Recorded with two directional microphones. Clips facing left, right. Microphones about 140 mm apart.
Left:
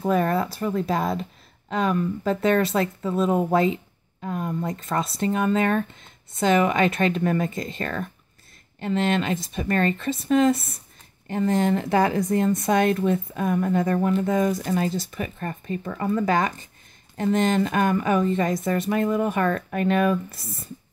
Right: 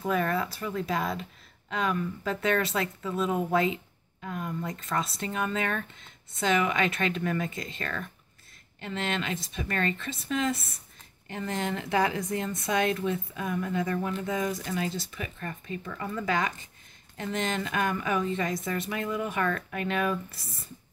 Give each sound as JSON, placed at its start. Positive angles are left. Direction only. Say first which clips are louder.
{"t": 0.0, "sound": "speech", "louder": "left 6 dB", "side_deg": 35}